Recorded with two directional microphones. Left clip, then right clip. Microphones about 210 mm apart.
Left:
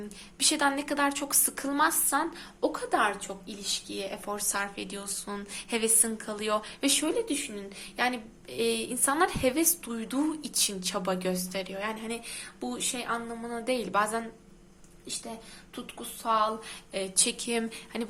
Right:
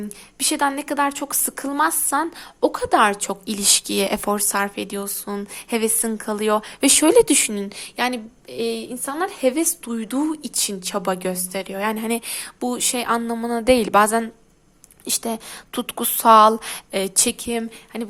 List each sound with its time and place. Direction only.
0.3 s a woman's voice: 30° right (ahead or behind)
15.0 s a woman's voice: 50° right (ahead or behind); by 18.1 s 25° right (ahead or behind)